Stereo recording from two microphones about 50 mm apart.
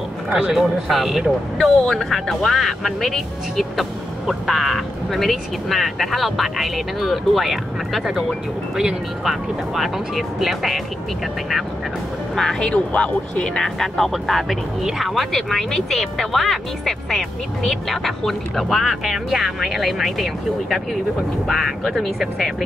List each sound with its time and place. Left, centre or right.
0.3 s speech: centre
12.7 s speech: left
13.6 s speech: centre
21.5 s speech: centre